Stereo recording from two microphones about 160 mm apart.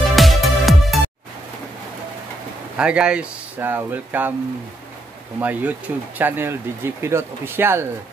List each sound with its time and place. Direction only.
0.0 s music: centre (ahead or behind)
2.8 s speech: 5° right (ahead or behind)
5.4 s speech: 10° right (ahead or behind)